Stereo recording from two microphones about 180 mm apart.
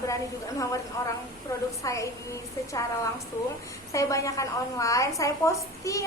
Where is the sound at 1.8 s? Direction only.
15° left (ahead or behind).